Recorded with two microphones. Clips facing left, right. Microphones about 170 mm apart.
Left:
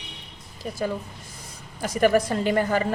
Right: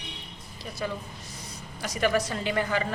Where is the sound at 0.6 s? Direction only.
40° left (ahead or behind).